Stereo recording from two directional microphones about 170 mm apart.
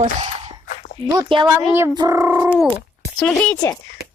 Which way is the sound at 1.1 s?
25° right (ahead or behind).